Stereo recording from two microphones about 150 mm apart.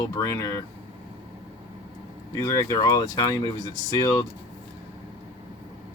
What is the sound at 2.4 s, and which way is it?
Speech, 20° left (ahead or behind).